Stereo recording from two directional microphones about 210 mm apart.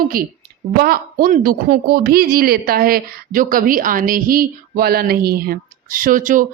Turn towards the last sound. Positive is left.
turn(degrees=-40)  # may be behind; listen again after turning